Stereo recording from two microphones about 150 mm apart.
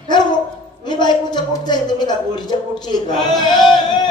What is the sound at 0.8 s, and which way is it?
A woman's voice, 30° left (ahead or behind).